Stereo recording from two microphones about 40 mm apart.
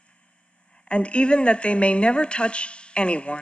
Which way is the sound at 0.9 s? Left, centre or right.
Left.